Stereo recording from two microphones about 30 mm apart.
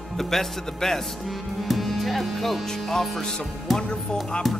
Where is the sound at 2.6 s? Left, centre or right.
Centre.